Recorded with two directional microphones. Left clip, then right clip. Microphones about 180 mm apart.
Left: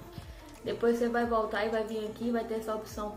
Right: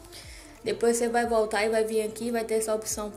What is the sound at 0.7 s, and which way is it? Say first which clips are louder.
A woman's voice: right 4 dB; 20° right (ahead or behind).